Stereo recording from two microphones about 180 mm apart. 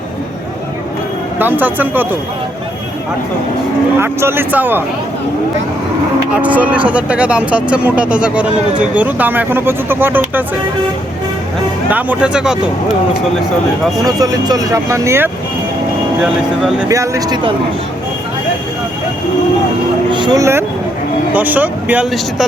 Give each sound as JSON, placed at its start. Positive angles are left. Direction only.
{"t": 1.4, "sound": "speech", "side_deg": -10}
{"t": 4.0, "sound": "speech", "side_deg": -15}
{"t": 6.3, "sound": "speech", "side_deg": -10}
{"t": 11.9, "sound": "speech", "side_deg": -10}
{"t": 14.0, "sound": "speech", "side_deg": -20}
{"t": 16.9, "sound": "speech", "side_deg": -15}
{"t": 20.1, "sound": "speech", "side_deg": -25}